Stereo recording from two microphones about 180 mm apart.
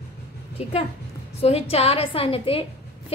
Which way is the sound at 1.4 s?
35° left (ahead or behind).